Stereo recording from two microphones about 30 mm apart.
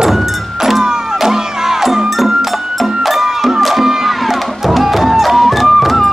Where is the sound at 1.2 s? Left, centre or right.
Centre.